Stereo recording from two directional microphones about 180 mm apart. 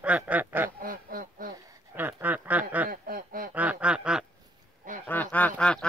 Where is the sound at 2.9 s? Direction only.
55° right (ahead or behind).